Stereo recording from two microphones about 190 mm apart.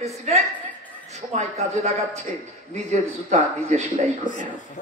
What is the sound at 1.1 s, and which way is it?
Speech, 35° right (ahead or behind).